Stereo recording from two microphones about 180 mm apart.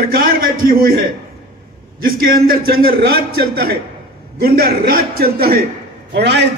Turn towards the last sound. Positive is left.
turn(degrees=-70)  # may be behind; listen again after turning